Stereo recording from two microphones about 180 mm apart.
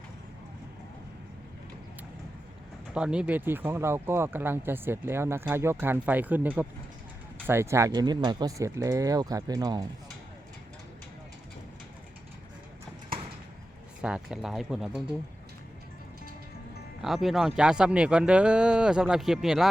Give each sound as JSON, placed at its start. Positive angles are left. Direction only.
{"t": 2.9, "sound": "speech", "side_deg": -5}
{"t": 14.0, "sound": "speech", "side_deg": -5}
{"t": 17.0, "sound": "speech", "side_deg": 0}